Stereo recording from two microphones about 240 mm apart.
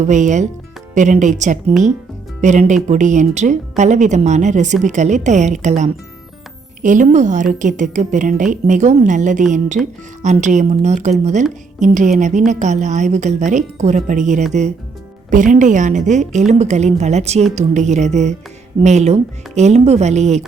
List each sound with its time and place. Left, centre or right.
0.0 s a woman's voice: right
9.8 s speech: centre
10.2 s a woman's voice: right